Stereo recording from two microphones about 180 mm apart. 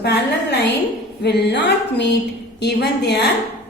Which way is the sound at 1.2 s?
70° left (ahead or behind).